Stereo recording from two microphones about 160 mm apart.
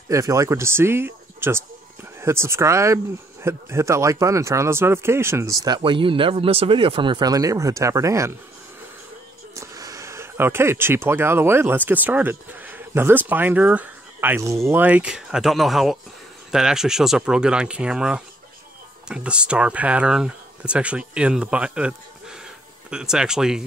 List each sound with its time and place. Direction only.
0.1 s speech: 20° right (ahead or behind)
5.8 s speech: 35° right (ahead or behind)
9.6 s speech: 20° right (ahead or behind); by 23.6 s 5° right (ahead or behind)